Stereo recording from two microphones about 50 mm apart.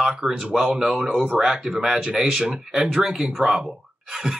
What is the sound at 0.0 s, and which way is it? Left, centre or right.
Speech, centre.